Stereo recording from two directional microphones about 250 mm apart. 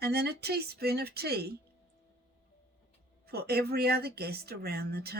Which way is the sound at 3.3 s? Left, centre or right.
Right.